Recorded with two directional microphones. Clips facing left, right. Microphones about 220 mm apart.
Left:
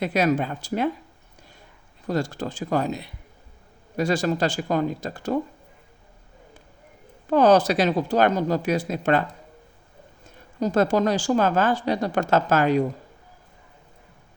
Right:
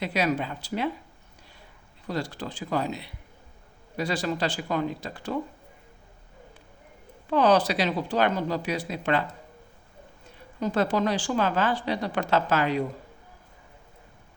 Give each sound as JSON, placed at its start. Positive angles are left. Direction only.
{"t": 0.0, "sound": "a woman's voice", "side_deg": 45}
{"t": 2.0, "sound": "a woman's voice", "side_deg": 45}
{"t": 7.3, "sound": "a woman's voice", "side_deg": 45}
{"t": 10.6, "sound": "a woman's voice", "side_deg": 45}